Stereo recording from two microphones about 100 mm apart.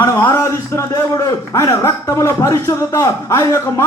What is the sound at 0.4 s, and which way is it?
Speech, 30° left (ahead or behind).